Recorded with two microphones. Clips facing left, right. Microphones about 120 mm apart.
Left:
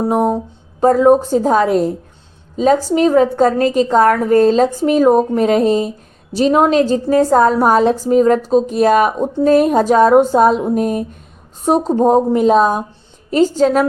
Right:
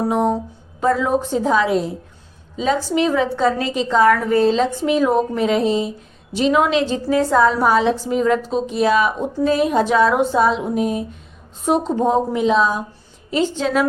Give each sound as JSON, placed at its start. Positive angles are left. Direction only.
{"t": 0.8, "sound": "a woman's voice", "side_deg": 45}